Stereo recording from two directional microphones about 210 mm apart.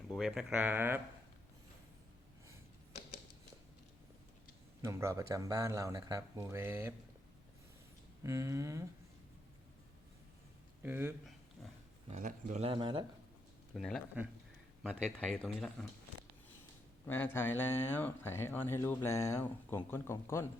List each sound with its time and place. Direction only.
0.1 s speech: centre (ahead or behind)
4.8 s speech: 15° right (ahead or behind)
8.2 s speech: 15° right (ahead or behind)
10.8 s speech: 10° right (ahead or behind)
11.6 s pig: centre (ahead or behind)
12.1 s speech: 35° right (ahead or behind)
13.7 s speech: 5° left (ahead or behind)
15.0 s speech: 5° left (ahead or behind)
17.1 s speech: 10° left (ahead or behind)